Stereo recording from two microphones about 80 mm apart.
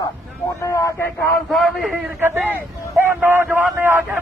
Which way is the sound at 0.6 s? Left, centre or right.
Left.